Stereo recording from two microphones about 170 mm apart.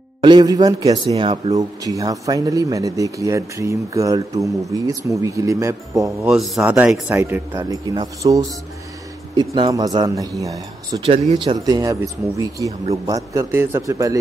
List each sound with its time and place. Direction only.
0.2 s speech: 25° right (ahead or behind)
6.2 s speech: centre (ahead or behind); by 14.1 s 20° right (ahead or behind)